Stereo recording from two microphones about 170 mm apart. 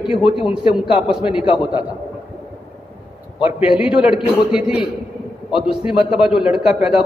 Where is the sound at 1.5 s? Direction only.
30° left (ahead or behind).